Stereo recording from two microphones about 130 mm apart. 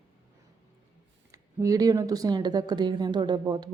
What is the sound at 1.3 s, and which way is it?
A woman's voice, 25° right (ahead or behind).